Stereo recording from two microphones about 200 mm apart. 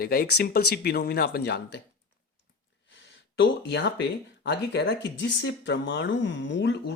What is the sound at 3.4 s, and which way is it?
Speech, 60° left (ahead or behind).